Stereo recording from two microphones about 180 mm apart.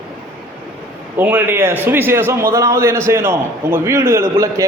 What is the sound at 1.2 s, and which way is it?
A man's voice, 10° right (ahead or behind).